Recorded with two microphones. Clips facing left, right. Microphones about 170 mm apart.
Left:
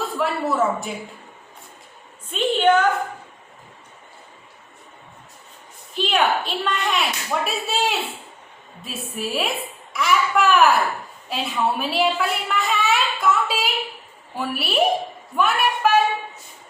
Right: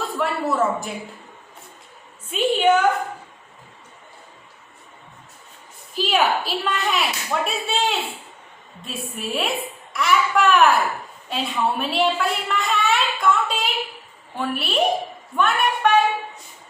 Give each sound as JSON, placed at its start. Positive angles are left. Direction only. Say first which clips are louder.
{"t": 0.0, "sound": "speech", "louder": "even", "side_deg": 0}
{"t": 2.3, "sound": "a woman's voice", "louder": "even", "side_deg": -5}
{"t": 5.9, "sound": "a woman's voice", "louder": "even", "side_deg": -5}